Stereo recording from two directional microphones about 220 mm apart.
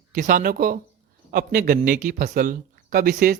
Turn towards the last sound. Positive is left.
turn(degrees=-40)  # may be behind; listen again after turning